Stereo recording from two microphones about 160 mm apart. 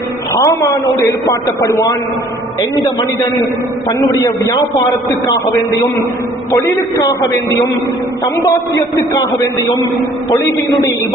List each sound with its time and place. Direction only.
0.3 s a man's voice: 20° left (ahead or behind)
6.5 s a man's voice: 20° left (ahead or behind)
10.2 s a man's voice: 20° left (ahead or behind)